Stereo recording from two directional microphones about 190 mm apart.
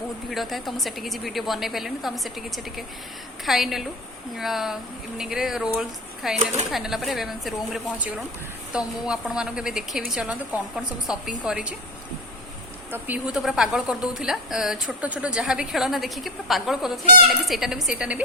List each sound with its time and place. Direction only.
0.3 s a woman's voice: centre (ahead or behind)
3.4 s a woman's voice: centre (ahead or behind)
12.9 s a woman's voice: 5° right (ahead or behind)